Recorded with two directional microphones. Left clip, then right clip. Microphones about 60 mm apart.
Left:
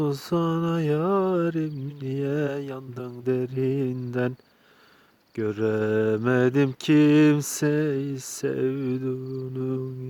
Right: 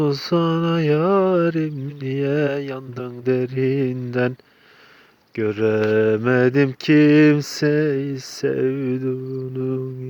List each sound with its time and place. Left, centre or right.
0.0 s speech: centre
5.4 s mantra: centre